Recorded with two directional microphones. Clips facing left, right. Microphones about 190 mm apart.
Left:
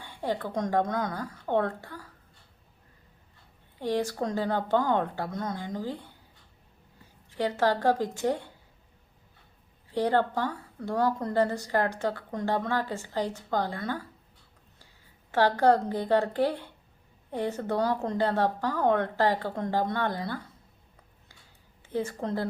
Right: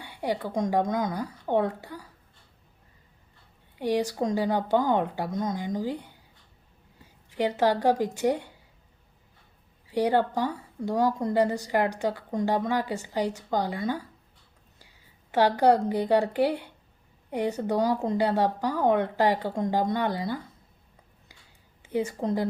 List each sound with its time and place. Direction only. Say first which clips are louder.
0.0 s a woman's voice: right 2 dB; 15° right (ahead or behind)
3.8 s a woman's voice: right 2 dB; 15° right (ahead or behind)
7.3 s a woman's voice: right 2 dB; 15° right (ahead or behind)
9.9 s a woman's voice: right 2 dB; 15° right (ahead or behind)
15.3 s a woman's voice: right 1 dB; 15° right (ahead or behind)
21.9 s a woman's voice: right 3 dB; 15° right (ahead or behind)